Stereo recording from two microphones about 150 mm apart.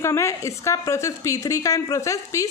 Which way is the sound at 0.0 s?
20° left (ahead or behind).